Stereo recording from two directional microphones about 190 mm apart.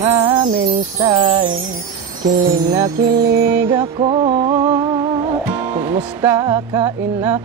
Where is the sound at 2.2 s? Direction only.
50° right (ahead or behind).